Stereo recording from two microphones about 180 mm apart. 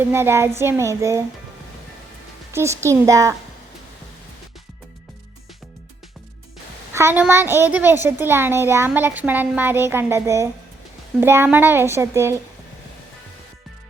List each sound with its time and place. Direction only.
0.1 s a child's voice: 15° right (ahead or behind)
2.5 s a child's voice: 15° right (ahead or behind)
6.9 s a child's voice: 10° right (ahead or behind)